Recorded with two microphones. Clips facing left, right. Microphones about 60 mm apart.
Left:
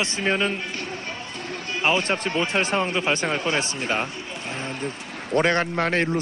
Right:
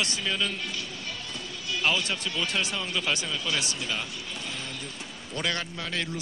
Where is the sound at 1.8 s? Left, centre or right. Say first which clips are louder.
Left 6 dB; left.